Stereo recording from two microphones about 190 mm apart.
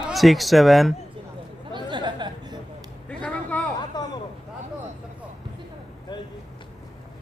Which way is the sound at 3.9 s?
20° left (ahead or behind).